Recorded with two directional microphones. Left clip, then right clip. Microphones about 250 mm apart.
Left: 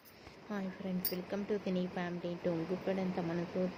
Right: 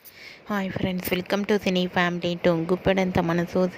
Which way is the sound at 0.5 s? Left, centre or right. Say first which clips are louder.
Right 14 dB; right.